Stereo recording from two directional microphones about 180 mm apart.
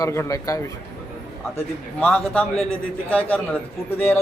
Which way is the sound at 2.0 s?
5° left (ahead or behind).